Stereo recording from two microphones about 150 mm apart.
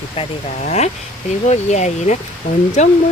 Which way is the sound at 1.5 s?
50° left (ahead or behind).